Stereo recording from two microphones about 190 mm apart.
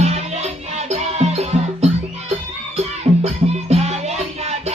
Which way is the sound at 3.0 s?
35° right (ahead or behind).